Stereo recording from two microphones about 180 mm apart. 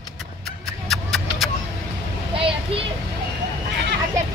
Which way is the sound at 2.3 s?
30° right (ahead or behind).